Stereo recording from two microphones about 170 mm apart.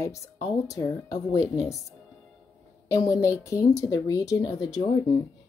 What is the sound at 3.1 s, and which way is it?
A woman's voice, 15° left (ahead or behind).